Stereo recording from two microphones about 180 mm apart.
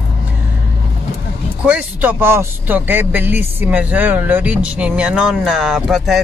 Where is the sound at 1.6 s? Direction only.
10° right (ahead or behind).